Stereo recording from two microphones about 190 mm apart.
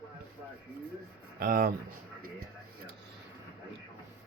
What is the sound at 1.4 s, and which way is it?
Speech, 50° right (ahead or behind).